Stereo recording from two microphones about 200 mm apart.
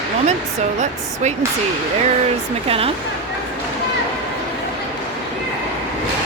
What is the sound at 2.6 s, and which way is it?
Speech, 30° right (ahead or behind).